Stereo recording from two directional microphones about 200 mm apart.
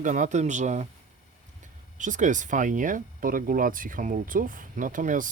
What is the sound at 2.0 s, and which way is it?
Speech, 40° right (ahead or behind).